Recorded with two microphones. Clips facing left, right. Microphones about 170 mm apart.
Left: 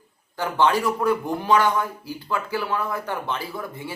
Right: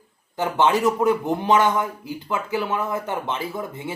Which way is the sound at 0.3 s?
20° right (ahead or behind).